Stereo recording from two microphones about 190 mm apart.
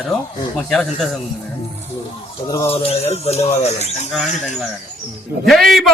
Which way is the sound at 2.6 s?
30° left (ahead or behind).